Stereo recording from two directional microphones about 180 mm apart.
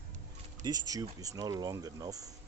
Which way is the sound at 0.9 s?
20° right (ahead or behind).